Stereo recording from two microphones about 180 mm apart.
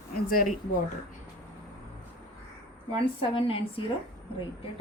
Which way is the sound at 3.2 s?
30° left (ahead or behind).